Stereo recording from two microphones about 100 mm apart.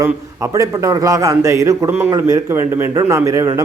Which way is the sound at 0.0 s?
30° right (ahead or behind).